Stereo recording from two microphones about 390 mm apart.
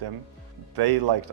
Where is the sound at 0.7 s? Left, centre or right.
Right.